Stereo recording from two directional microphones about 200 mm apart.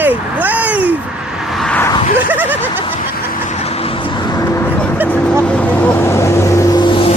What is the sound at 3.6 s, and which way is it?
Vehicle, 30° left (ahead or behind).